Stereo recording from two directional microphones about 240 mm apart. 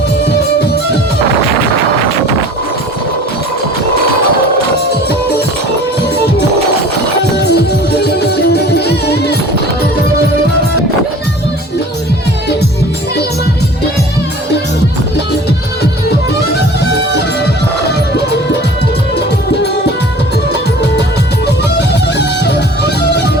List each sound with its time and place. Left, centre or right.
7.3 s music: left
21.4 s music: left